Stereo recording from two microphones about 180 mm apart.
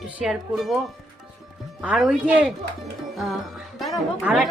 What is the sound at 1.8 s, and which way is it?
Speech, 5° right (ahead or behind).